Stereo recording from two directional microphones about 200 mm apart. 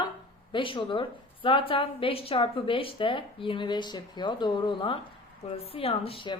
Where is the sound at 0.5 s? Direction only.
25° left (ahead or behind).